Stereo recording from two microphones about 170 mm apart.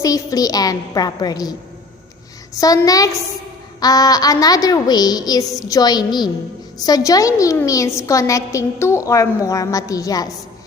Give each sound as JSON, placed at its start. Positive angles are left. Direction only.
{"t": 0.0, "sound": "a woman's voice", "side_deg": 20}
{"t": 2.6, "sound": "a woman's voice", "side_deg": 20}